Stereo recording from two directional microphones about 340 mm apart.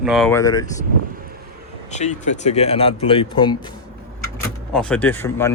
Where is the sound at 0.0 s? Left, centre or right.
Centre.